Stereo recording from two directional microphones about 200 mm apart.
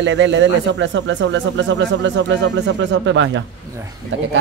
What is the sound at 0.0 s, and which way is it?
Speech, 65° right (ahead or behind).